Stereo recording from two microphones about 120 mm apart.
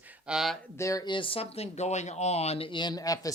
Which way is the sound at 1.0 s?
45° left (ahead or behind).